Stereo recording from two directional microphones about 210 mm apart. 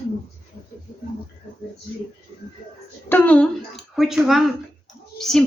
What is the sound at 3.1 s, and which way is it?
A woman's voice, 5° left (ahead or behind).